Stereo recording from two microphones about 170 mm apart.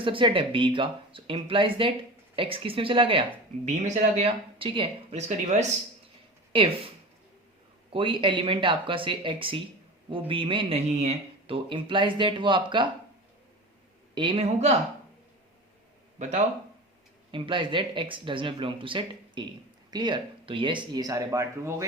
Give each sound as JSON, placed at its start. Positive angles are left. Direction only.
{"t": 0.0, "sound": "speech", "side_deg": -30}
{"t": 3.8, "sound": "speech", "side_deg": -40}
{"t": 7.9, "sound": "speech", "side_deg": -30}
{"t": 14.2, "sound": "speech", "side_deg": -30}
{"t": 17.3, "sound": "speech", "side_deg": -30}